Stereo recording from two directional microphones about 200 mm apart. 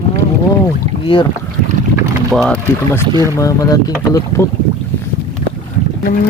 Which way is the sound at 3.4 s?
15° left (ahead or behind).